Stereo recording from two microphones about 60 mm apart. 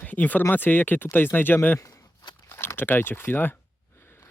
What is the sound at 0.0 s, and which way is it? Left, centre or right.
Speech, left.